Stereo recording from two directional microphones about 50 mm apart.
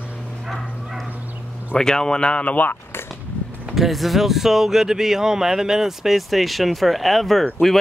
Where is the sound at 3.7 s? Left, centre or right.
Centre.